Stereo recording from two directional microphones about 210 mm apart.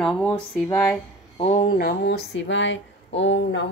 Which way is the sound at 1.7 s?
50° left (ahead or behind).